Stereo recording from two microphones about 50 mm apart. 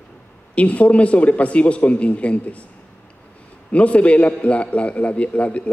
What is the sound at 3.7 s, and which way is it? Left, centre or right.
A man's voice, left.